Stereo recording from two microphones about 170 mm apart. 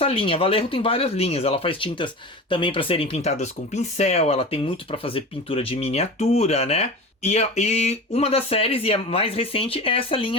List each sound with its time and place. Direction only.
0.0 s speech: 35° left (ahead or behind)